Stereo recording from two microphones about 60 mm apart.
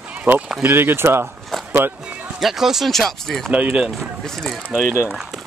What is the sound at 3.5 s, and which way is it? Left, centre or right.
Speech, right.